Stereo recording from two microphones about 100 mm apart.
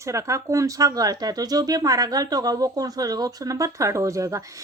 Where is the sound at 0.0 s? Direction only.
30° right (ahead or behind).